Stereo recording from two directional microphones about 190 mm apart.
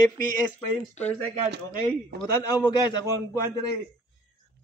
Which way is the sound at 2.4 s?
20° left (ahead or behind).